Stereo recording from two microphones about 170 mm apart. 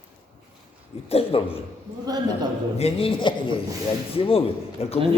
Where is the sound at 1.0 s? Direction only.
35° left (ahead or behind).